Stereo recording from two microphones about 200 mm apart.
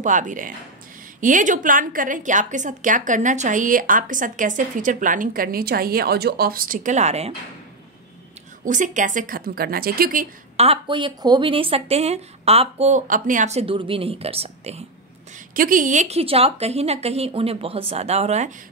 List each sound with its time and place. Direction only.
0.0 s a woman's voice: 40° right (ahead or behind)
8.6 s a woman's voice: 40° right (ahead or behind)
10.6 s speech: 25° right (ahead or behind)
15.5 s a woman's voice: 45° right (ahead or behind)